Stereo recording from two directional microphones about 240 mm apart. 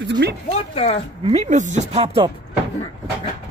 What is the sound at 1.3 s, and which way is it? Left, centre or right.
Speech, right.